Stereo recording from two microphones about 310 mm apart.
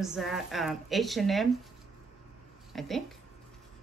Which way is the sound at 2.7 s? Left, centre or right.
Centre.